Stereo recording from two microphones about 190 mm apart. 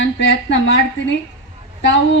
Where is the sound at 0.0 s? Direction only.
75° left (ahead or behind).